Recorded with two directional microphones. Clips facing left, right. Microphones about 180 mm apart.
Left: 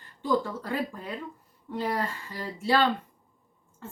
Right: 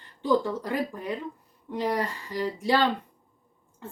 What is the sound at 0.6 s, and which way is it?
A woman's voice, 15° right (ahead or behind).